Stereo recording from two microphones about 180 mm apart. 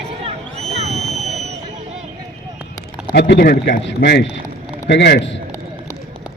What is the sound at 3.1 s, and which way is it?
A man's voice, 70° left (ahead or behind).